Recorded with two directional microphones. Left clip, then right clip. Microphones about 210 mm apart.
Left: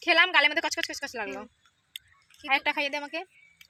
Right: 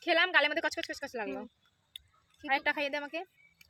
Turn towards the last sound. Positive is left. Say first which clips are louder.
# left 4 dB
turn(degrees=10)  # may be behind; listen again after turning